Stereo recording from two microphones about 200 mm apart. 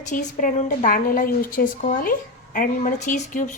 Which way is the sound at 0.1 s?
40° left (ahead or behind).